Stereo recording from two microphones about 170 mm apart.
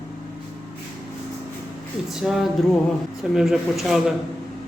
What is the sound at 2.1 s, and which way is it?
Speech, centre (ahead or behind).